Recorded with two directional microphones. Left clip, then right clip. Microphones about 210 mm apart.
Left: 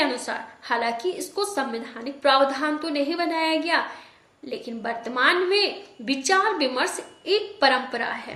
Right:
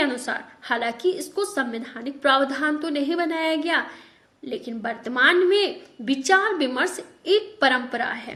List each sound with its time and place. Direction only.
0.0 s a woman's voice: 40° right (ahead or behind)